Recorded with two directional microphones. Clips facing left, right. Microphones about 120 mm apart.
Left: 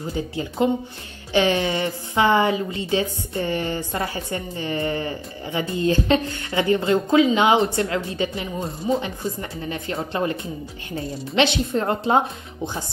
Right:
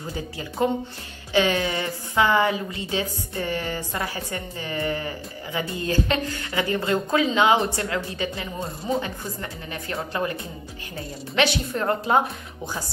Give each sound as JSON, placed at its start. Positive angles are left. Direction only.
{"t": 0.6, "sound": "a woman's voice", "side_deg": 20}
{"t": 11.0, "sound": "a woman's voice", "side_deg": 25}